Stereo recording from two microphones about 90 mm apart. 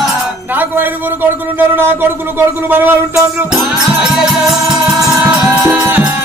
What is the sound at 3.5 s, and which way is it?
Music, 5° right (ahead or behind).